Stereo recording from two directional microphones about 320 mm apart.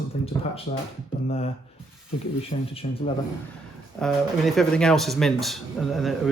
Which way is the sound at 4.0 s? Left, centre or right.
Centre.